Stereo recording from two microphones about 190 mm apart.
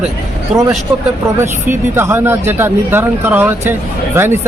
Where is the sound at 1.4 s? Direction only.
10° right (ahead or behind).